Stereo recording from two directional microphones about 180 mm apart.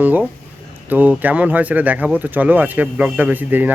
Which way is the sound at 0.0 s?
10° right (ahead or behind).